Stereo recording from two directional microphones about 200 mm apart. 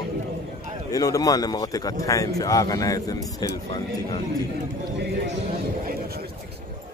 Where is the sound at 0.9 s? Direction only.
15° left (ahead or behind).